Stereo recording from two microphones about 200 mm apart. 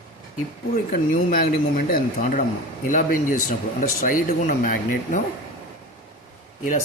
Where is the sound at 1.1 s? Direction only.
45° left (ahead or behind).